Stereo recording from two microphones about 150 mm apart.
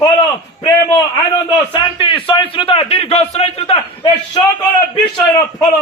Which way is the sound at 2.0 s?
35° left (ahead or behind).